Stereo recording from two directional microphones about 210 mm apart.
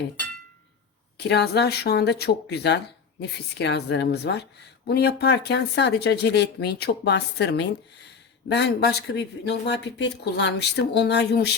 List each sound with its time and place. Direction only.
1.3 s speech: 50° left (ahead or behind)